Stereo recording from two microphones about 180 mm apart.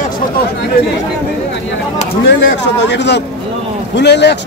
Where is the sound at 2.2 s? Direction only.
80° left.